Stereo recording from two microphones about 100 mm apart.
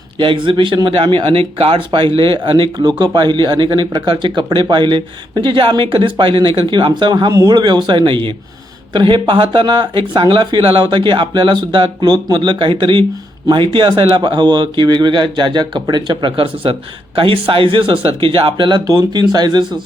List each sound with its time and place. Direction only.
0.2 s speech: 55° right (ahead or behind)